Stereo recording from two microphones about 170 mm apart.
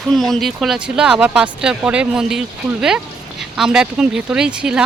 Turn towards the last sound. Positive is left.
turn(degrees=-5)  # may be behind; listen again after turning